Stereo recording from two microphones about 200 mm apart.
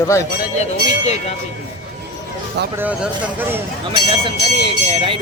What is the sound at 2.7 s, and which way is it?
Speech, 10° right (ahead or behind).